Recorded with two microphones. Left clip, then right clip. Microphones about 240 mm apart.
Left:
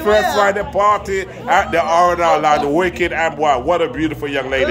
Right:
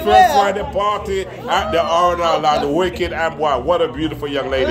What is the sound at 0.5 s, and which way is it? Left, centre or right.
A man's voice, centre.